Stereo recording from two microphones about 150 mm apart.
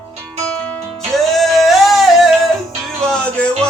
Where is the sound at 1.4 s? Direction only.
Centre (ahead or behind).